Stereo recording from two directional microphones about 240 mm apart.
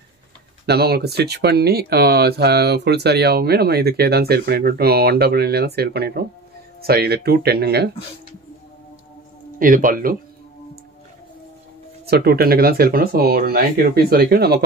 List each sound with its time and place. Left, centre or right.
0.7 s speech: right
9.6 s speech: right
12.1 s speech: right